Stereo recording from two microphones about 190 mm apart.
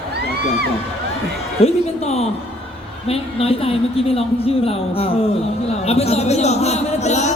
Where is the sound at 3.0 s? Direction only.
30° left (ahead or behind).